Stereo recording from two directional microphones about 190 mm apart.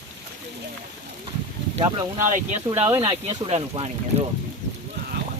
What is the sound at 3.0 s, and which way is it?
Speech, 35° right (ahead or behind).